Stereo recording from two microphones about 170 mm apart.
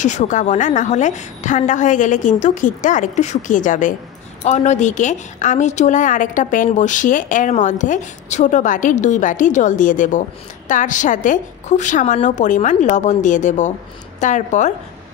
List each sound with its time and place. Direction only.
0.0 s a woman's voice: 45° left (ahead or behind)